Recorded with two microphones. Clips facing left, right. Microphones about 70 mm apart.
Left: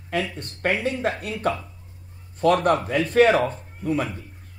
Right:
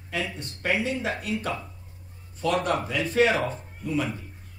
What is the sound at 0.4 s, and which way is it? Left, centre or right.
Speech, left.